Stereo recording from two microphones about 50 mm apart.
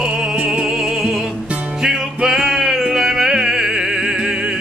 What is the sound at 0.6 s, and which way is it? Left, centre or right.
Music, centre.